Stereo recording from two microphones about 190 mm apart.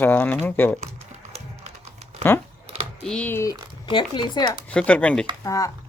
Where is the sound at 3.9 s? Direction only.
25° left (ahead or behind).